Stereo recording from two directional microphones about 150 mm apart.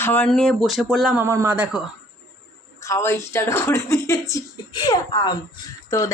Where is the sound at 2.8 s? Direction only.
20° left (ahead or behind).